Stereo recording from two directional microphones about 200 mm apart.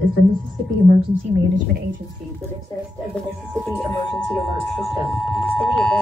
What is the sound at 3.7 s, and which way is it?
Speech, centre (ahead or behind).